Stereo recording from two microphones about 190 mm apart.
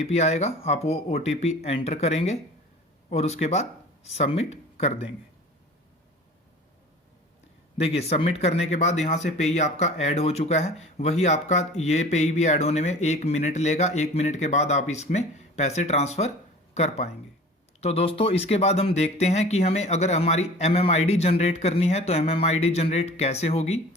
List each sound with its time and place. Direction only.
0.0 s speech: 35° left (ahead or behind)
7.8 s speech: 35° left (ahead or behind)